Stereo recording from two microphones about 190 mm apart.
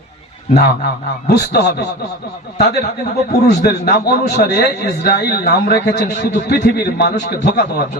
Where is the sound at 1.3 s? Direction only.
60° left (ahead or behind).